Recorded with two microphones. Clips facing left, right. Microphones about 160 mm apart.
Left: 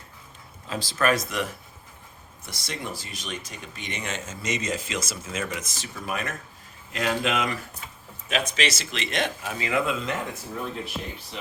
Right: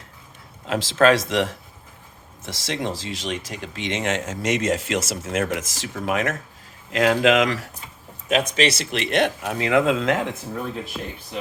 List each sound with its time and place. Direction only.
0.7 s speech: 90° right
8.3 s speech: 45° right (ahead or behind); by 10.3 s 90° right